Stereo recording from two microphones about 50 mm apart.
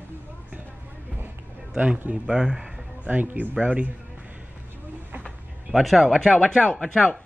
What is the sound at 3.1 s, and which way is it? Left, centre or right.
Speech, right.